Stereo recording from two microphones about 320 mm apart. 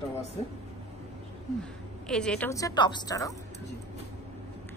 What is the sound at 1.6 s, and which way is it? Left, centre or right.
A woman's voice, centre.